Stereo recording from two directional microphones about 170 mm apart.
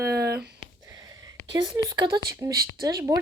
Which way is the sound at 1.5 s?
25° right (ahead or behind).